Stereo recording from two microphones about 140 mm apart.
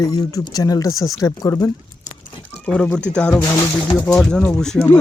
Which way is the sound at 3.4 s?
20° left (ahead or behind).